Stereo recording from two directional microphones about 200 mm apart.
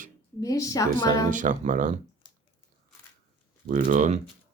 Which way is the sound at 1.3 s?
40° right (ahead or behind).